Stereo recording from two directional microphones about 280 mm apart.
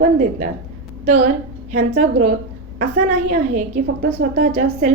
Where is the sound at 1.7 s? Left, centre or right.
Right.